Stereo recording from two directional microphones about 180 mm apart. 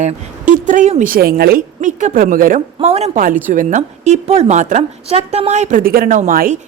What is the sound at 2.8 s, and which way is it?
A woman's voice, 35° right (ahead or behind).